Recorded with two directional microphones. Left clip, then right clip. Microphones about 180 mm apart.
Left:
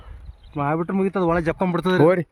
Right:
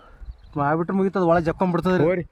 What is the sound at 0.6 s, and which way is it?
Speech, 40° right (ahead or behind).